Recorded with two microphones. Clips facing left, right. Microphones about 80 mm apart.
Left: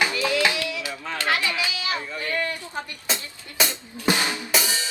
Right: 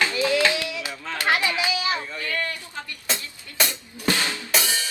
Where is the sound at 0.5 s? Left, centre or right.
Right.